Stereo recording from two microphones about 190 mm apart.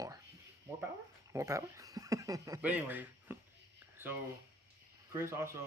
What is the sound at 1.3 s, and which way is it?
Speech, 15° right (ahead or behind).